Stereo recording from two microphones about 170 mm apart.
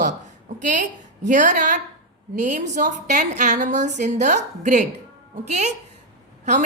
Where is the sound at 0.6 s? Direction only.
50° right (ahead or behind).